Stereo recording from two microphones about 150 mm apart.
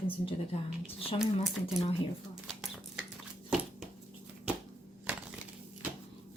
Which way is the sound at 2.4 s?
Centre (ahead or behind).